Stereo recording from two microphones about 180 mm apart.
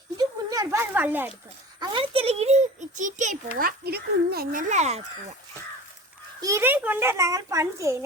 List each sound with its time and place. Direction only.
0.2 s a sound: 20° right (ahead or behind)
1.8 s a child's voice: 25° right (ahead or behind)
6.4 s a child's voice: 15° right (ahead or behind)